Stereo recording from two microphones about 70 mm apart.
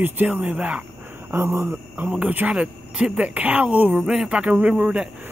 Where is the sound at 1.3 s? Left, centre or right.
Right.